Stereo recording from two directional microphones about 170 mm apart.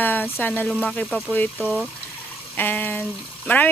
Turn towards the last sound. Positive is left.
turn(degrees=10)  # may be behind; listen again after turning